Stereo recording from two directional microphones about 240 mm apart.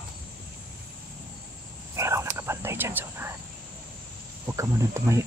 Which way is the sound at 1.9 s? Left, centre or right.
Centre.